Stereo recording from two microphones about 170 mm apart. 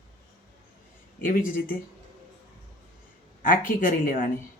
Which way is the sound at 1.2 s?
55° left (ahead or behind).